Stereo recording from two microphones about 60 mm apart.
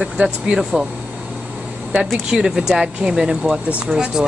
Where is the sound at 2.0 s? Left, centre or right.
Centre.